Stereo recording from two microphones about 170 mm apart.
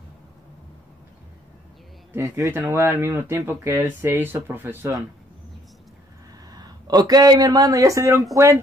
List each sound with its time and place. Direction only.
2.1 s speech: 15° right (ahead or behind)
6.5 s speech: 25° right (ahead or behind)